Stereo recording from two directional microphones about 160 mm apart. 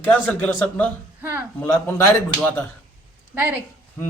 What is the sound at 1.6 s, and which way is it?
Speech, 15° left (ahead or behind).